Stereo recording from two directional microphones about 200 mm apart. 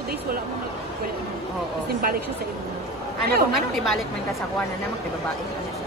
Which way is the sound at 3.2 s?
50° right (ahead or behind).